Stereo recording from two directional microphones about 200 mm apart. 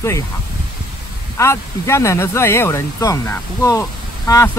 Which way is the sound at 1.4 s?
15° left (ahead or behind).